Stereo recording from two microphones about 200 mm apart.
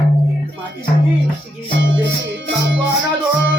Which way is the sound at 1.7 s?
65° right (ahead or behind).